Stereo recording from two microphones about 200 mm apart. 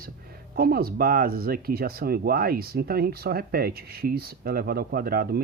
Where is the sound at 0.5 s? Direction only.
50° right (ahead or behind).